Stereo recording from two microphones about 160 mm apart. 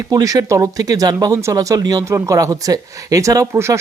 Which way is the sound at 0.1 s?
25° right (ahead or behind).